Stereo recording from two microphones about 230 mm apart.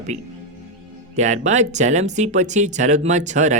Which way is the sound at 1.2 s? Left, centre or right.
Right.